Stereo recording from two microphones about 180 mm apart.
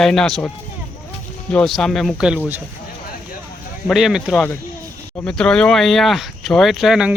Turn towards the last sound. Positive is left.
turn(degrees=-5)  # may be behind; listen again after turning